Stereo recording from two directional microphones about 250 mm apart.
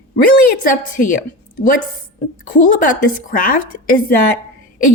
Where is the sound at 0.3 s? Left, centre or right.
Left.